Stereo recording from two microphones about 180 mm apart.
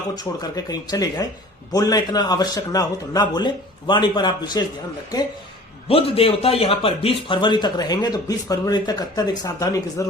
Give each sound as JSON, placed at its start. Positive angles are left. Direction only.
{"t": 0.2, "sound": "speech", "side_deg": 20}
{"t": 5.9, "sound": "speech", "side_deg": 30}